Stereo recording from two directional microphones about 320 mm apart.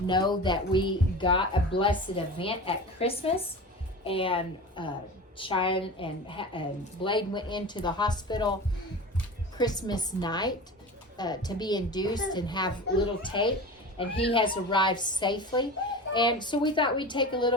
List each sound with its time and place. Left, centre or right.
0.1 s speech: centre
9.6 s speech: centre